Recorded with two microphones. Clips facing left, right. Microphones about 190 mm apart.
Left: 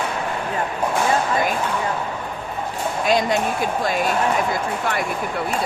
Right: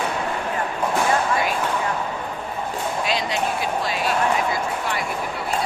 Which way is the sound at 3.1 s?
50° left (ahead or behind).